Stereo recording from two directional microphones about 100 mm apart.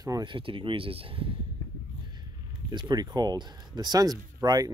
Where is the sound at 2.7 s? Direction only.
50° right (ahead or behind).